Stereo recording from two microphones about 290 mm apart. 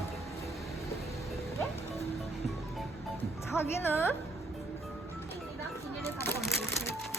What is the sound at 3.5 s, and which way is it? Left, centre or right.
Speech, centre.